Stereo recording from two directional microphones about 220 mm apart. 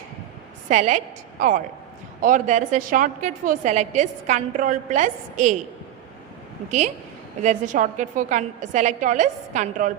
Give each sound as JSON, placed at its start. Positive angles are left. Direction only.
{"t": 0.7, "sound": "a woman's voice", "side_deg": -35}
{"t": 6.7, "sound": "a woman's voice", "side_deg": -35}